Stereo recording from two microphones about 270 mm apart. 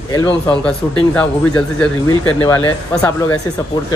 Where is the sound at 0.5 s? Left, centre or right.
Centre.